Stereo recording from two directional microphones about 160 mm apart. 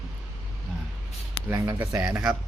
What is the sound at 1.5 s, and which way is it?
Speech, 15° right (ahead or behind).